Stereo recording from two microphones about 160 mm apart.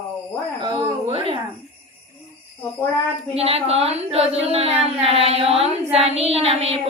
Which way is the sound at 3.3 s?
40° right (ahead or behind).